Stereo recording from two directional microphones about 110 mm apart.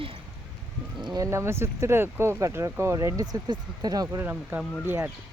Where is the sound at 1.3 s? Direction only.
25° right (ahead or behind).